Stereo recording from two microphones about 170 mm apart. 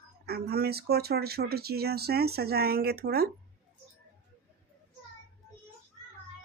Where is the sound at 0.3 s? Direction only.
65° right (ahead or behind).